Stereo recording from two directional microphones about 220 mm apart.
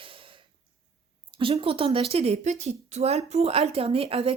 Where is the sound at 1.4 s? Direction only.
25° right (ahead or behind).